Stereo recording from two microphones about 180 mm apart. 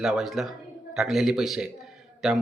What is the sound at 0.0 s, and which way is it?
Speech, centre (ahead or behind).